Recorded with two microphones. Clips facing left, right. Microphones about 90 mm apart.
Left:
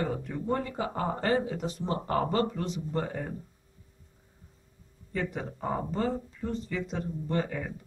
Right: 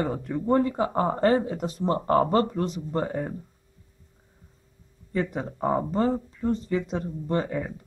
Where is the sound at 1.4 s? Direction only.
45° right (ahead or behind).